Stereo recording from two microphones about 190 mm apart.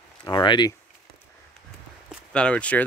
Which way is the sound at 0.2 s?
25° left (ahead or behind).